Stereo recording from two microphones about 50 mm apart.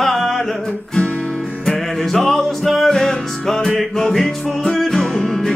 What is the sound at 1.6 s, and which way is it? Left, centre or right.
Music, centre.